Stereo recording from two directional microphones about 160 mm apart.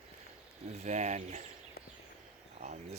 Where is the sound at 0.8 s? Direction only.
45° right (ahead or behind).